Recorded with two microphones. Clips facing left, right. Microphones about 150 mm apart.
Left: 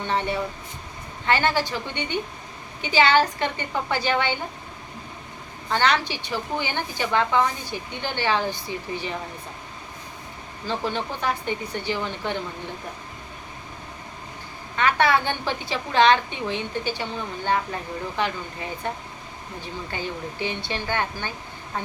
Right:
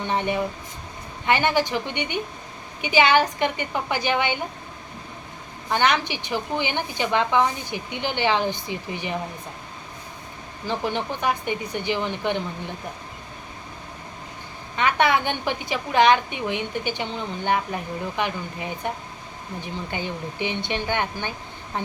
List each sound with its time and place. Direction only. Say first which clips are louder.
0.1 s a woman's voice: right 1 dB; 15° right (ahead or behind)
5.6 s a woman's voice: right 1 dB; 15° right (ahead or behind)
10.7 s a woman's voice: right 1 dB; 15° right (ahead or behind)
14.8 s a woman's voice: even; 20° right (ahead or behind)